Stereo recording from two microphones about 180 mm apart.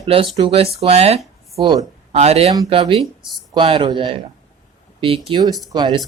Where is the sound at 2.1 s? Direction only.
35° right (ahead or behind).